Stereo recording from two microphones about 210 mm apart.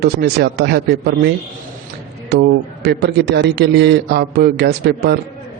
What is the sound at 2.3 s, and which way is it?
A man's voice, 50° right (ahead or behind).